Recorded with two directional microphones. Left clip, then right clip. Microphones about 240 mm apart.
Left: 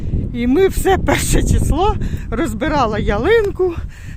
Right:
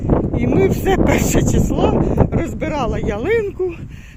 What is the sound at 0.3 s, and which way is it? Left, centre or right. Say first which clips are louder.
Speech: left 6 dB; left.